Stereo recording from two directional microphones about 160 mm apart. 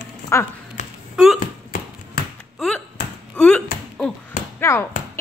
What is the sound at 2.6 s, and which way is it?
Speech, centre (ahead or behind).